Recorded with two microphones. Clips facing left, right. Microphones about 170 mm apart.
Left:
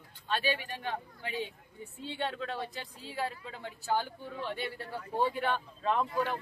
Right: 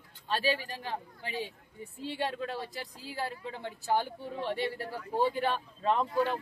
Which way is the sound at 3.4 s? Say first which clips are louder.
Right 4 dB; 25° right (ahead or behind).